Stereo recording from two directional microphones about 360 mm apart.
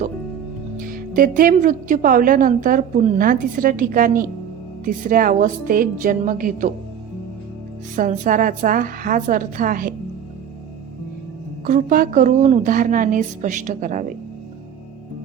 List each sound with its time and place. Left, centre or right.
0.8 s speech: right
7.9 s speech: right
11.6 s speech: right